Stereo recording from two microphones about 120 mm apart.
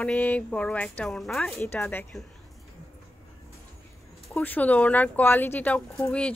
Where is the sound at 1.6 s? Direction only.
15° left (ahead or behind).